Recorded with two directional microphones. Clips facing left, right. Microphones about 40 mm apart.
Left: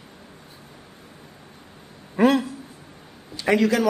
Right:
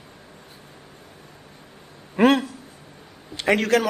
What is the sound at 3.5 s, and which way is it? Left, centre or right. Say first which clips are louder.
Speech: even; right.